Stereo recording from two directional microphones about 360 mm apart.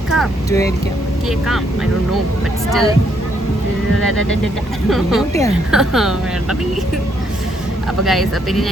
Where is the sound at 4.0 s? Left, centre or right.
Right.